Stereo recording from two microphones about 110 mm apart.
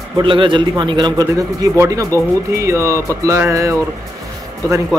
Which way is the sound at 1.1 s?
30° right (ahead or behind).